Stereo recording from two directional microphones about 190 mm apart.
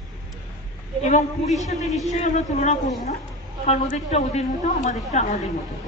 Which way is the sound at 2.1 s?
40° left (ahead or behind).